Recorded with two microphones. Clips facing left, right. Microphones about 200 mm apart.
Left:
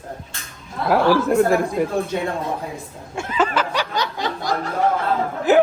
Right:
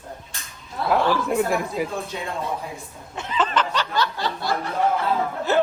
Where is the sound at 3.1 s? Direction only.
10° left (ahead or behind).